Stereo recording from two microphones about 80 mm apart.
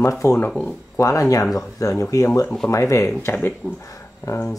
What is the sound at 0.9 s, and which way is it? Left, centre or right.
Speech, left.